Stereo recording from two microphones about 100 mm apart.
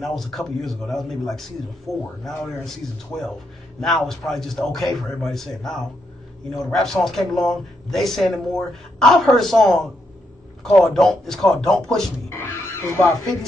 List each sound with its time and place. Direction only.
0.0 s a man's voice: centre (ahead or behind)
12.3 s music: 25° left (ahead or behind)